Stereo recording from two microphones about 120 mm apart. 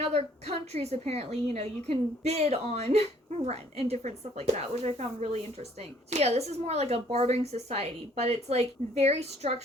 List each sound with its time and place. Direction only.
0.0 s a woman's voice: 60° right (ahead or behind)